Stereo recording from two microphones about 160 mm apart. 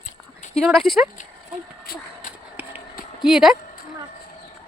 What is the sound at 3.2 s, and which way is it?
Speech, centre (ahead or behind).